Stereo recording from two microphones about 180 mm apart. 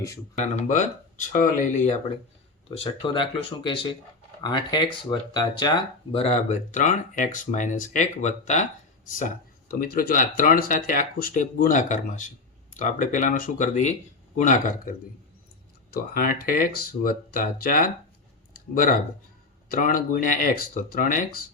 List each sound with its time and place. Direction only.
0.3 s speech: 40° left (ahead or behind)
2.6 s speech: 30° left (ahead or behind); by 17.9 s 50° left (ahead or behind)
18.5 s a sound: 50° left (ahead or behind)
19.6 s speech: 50° left (ahead or behind)